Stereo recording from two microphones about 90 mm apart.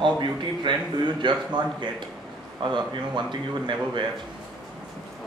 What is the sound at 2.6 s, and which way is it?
Speech, 60° right (ahead or behind).